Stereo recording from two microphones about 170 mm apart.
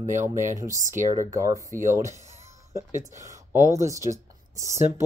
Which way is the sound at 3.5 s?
15° right (ahead or behind).